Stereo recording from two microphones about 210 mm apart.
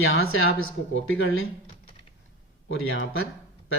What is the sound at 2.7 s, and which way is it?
Speech, 75° left (ahead or behind).